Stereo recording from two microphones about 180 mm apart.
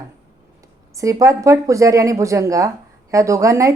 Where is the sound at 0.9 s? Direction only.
20° right (ahead or behind).